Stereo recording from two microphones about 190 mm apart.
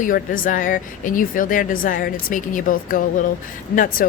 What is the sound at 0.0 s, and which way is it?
A woman's voice, 45° left (ahead or behind).